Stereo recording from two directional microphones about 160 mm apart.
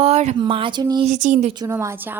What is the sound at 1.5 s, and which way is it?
Speech, 20° right (ahead or behind).